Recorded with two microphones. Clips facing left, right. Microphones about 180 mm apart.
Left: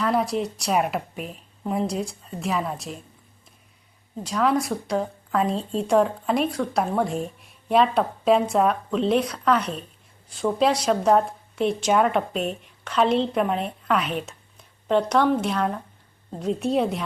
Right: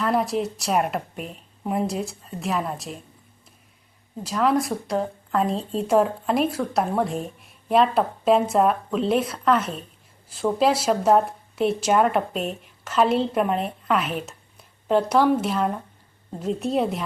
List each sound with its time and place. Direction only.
0.0 s a woman's voice: centre (ahead or behind)
4.2 s a woman's voice: centre (ahead or behind)